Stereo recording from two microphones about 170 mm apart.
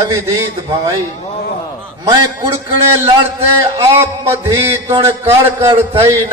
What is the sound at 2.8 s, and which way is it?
Speech, 15° right (ahead or behind).